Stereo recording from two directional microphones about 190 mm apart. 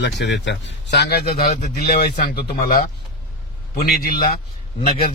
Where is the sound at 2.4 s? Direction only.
45° left (ahead or behind).